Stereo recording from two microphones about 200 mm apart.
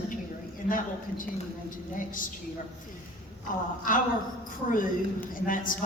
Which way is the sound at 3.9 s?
40° left (ahead or behind).